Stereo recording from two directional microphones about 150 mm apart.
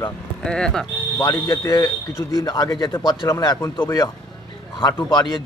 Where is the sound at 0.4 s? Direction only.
5° left (ahead or behind).